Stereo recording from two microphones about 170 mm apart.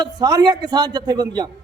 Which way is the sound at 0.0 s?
25° right (ahead or behind).